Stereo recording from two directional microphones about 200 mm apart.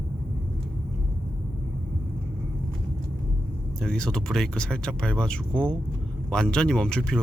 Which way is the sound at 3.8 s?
5° left (ahead or behind).